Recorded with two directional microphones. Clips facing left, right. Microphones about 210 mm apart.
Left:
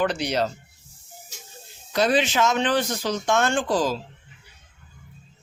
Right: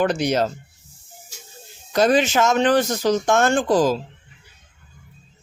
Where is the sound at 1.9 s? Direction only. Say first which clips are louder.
Right 4 dB; 45° right (ahead or behind).